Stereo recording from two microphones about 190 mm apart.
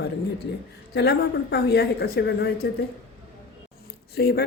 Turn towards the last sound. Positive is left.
turn(degrees=55)  # may be behind; listen again after turning